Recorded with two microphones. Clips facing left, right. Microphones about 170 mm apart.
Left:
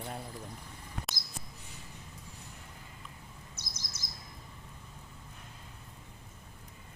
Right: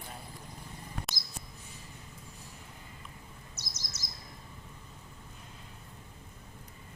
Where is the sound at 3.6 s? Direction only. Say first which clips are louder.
Even; 55° left (ahead or behind).